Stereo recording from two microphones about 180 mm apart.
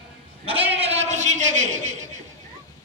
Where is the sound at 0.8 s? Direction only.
35° right (ahead or behind).